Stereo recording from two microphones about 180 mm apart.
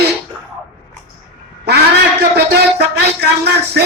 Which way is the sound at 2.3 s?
65° right (ahead or behind).